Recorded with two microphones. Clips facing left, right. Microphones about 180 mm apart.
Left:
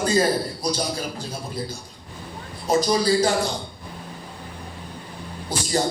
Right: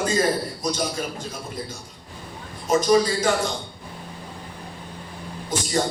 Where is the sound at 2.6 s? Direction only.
35° left (ahead or behind).